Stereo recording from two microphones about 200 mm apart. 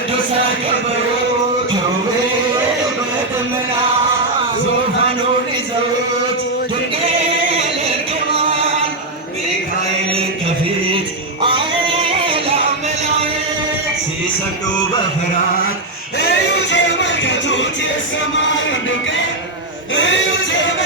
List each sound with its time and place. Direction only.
12.2 s music: 25° right (ahead or behind)
16.7 s music: 65° left (ahead or behind)
20.0 s a sound: 70° left (ahead or behind)